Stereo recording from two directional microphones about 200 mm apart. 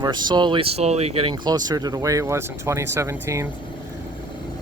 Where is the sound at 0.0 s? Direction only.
20° right (ahead or behind).